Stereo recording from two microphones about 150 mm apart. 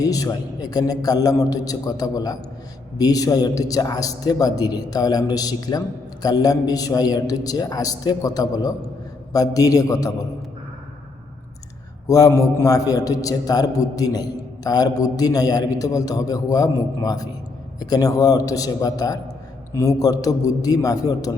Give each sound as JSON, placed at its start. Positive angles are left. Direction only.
{"t": 0.0, "sound": "a man's voice", "side_deg": 25}
{"t": 12.0, "sound": "a man's voice", "side_deg": 25}